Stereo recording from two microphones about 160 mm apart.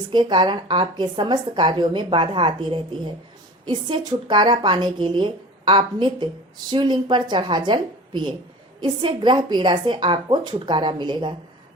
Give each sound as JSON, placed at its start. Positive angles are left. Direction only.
{"t": 0.1, "sound": "a woman's voice", "side_deg": -30}